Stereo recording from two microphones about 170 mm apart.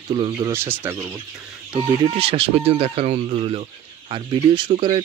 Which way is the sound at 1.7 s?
35° right (ahead or behind).